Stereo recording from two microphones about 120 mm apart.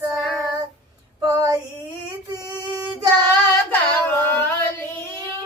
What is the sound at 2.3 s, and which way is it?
Singing, 30° right (ahead or behind).